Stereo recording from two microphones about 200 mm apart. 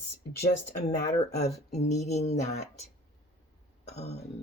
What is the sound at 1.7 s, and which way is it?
Speech, 35° left (ahead or behind).